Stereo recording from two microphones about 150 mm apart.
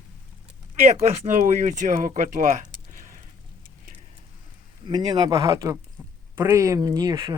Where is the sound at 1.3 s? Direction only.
60° right (ahead or behind).